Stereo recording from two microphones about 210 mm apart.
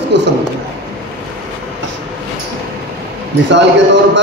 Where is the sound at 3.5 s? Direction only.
55° right (ahead or behind).